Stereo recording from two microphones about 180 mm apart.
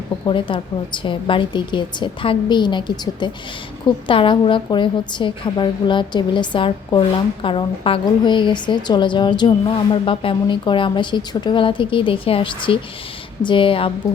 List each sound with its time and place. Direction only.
0.3 s a woman's voice: 25° left (ahead or behind)